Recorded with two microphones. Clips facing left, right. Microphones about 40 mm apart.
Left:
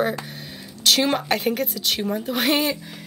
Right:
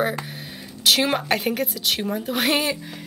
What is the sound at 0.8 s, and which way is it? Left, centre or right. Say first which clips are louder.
A woman's voice: even; centre.